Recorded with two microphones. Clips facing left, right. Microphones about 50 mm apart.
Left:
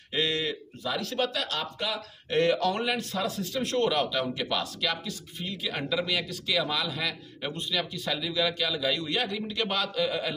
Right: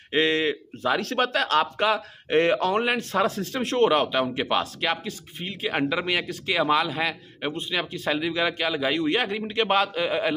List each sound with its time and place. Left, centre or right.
0.1 s a man's voice: right
2.2 s speech: right